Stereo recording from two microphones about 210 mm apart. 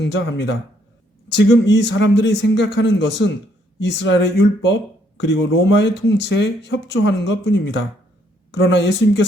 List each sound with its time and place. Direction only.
0.0 s speech: 55° left (ahead or behind)